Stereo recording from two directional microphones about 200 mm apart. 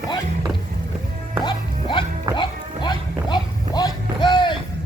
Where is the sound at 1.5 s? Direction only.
25° left (ahead or behind).